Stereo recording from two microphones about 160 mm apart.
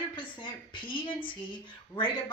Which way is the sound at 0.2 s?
30° left (ahead or behind).